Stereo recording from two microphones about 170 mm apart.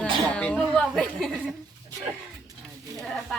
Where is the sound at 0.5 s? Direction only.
5° right (ahead or behind).